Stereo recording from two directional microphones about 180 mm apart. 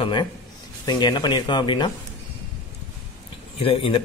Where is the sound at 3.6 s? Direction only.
30° left (ahead or behind).